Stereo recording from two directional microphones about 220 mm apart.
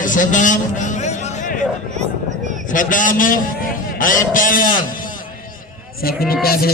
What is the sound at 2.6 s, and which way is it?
A man's voice, 35° left (ahead or behind).